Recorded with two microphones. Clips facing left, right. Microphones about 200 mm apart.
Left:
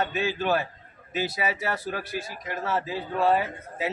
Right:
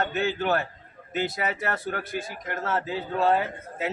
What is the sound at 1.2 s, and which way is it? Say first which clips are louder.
A man's voice: even; centre (ahead or behind).